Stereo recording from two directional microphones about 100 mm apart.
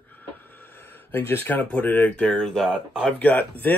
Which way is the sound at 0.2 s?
20° left (ahead or behind).